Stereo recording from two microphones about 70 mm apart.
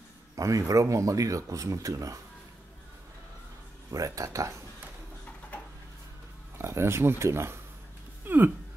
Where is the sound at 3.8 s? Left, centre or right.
Right.